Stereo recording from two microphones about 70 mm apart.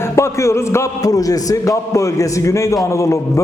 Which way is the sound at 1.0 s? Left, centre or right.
Left.